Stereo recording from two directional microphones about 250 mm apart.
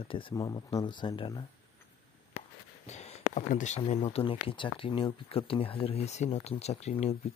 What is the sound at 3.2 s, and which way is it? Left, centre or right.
Speech, left.